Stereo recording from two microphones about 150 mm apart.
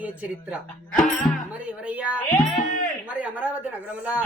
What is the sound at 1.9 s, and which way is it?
Speech, 10° right (ahead or behind).